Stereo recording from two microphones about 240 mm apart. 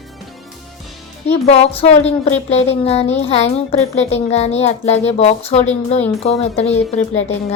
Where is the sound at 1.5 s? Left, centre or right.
Left.